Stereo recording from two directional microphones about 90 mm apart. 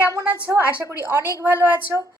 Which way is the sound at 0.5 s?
30° right (ahead or behind).